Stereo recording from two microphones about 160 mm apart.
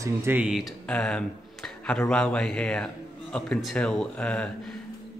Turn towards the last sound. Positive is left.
turn(degrees=5)  # may be behind; listen again after turning